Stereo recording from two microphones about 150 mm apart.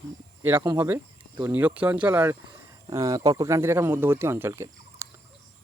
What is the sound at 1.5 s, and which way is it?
Speech, 10° right (ahead or behind).